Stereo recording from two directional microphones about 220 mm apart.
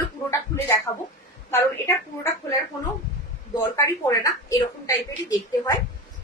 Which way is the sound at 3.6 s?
15° left (ahead or behind).